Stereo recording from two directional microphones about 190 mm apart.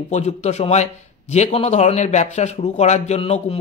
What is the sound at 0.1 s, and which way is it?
A man's voice, 35° left (ahead or behind).